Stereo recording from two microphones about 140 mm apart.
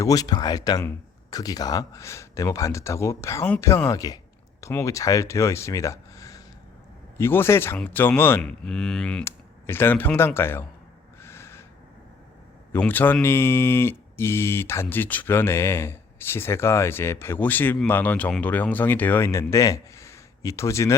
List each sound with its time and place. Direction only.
0.0 s speech: 25° left (ahead or behind); by 9.2 s 5° left (ahead or behind)
9.2 s speech: 15° left (ahead or behind)
11.2 s owl: 20° left (ahead or behind)
12.7 s speech: 15° left (ahead or behind)